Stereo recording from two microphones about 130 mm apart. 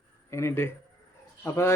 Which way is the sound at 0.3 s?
20° left (ahead or behind).